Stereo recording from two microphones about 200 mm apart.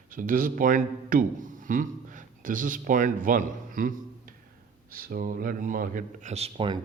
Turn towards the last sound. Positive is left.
turn(degrees=-30)  # may be behind; listen again after turning